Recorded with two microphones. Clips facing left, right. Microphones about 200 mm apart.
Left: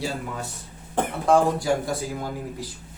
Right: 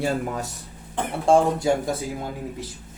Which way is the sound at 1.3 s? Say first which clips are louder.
Right 2 dB; 25° right (ahead or behind).